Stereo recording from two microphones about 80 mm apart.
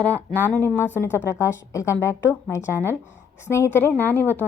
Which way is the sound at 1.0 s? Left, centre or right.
Left.